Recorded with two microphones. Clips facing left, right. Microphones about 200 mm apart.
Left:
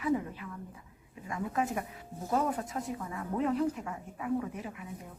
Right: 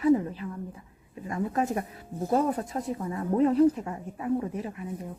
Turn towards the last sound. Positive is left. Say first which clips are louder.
# right 6 dB
turn(degrees=-35)  # may be behind; listen again after turning